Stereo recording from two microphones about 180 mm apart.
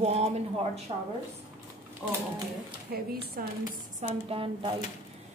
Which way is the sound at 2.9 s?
55° right (ahead or behind).